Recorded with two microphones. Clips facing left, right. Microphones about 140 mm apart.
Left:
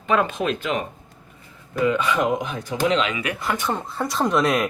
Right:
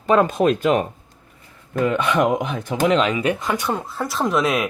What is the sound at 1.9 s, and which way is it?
Speech, 60° right (ahead or behind).